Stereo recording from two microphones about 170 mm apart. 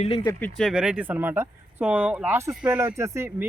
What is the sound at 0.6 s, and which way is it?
Speech, 5° right (ahead or behind).